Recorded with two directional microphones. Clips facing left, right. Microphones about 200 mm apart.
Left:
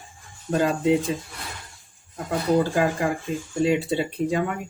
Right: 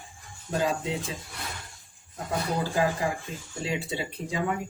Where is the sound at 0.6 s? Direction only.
60° left (ahead or behind).